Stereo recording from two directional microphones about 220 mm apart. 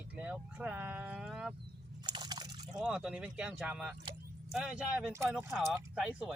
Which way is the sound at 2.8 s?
5° right (ahead or behind).